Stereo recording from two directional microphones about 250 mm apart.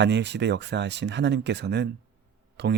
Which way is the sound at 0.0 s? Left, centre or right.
Right.